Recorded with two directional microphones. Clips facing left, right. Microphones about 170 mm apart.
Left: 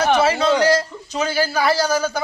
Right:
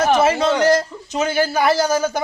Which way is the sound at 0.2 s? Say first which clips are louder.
Right 1 dB; 20° right (ahead or behind).